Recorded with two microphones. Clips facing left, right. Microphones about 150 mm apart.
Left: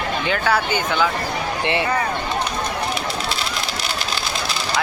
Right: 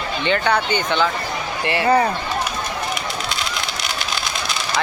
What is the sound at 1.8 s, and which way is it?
Speech, 30° right (ahead or behind).